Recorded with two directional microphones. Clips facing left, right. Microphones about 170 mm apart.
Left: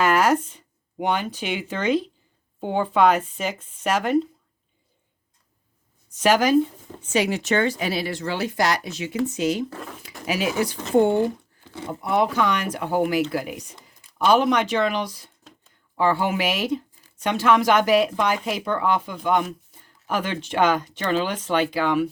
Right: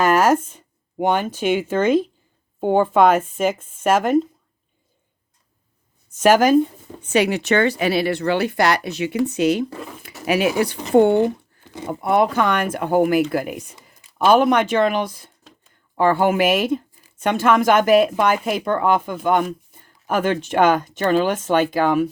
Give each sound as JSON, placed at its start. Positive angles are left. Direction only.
{"t": 0.0, "sound": "speech", "side_deg": -45}
{"t": 6.1, "sound": "speech", "side_deg": -50}
{"t": 7.0, "sound": "speech", "side_deg": -65}